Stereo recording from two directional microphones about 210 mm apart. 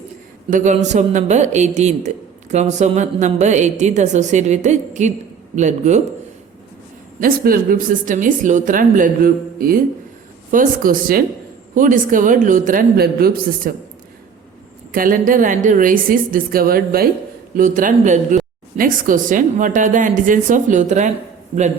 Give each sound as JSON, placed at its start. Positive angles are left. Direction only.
{"t": 0.5, "sound": "a man's voice", "side_deg": -35}
{"t": 7.2, "sound": "a man's voice", "side_deg": -45}
{"t": 14.9, "sound": "a man's voice", "side_deg": -40}